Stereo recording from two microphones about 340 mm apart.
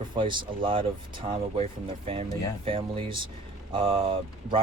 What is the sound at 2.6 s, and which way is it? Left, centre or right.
Speech, centre.